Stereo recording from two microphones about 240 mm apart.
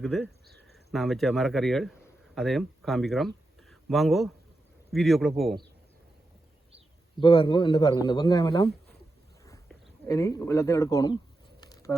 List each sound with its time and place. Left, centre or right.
0.0 s a man's voice: centre
7.2 s a man's voice: left
10.1 s a man's voice: centre
11.6 s a sound: centre